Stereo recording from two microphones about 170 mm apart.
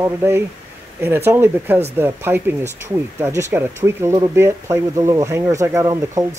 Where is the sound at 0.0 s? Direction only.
15° right (ahead or behind).